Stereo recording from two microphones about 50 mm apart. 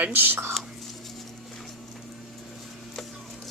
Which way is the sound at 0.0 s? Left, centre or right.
Right.